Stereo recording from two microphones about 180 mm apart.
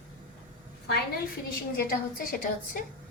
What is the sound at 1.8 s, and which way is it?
A woman's voice, 50° left (ahead or behind).